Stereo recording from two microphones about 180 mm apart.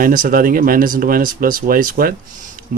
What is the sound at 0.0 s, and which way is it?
Speech, 50° right (ahead or behind).